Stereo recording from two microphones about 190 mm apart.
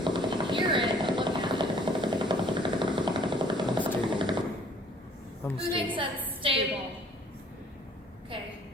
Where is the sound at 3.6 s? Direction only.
25° right (ahead or behind).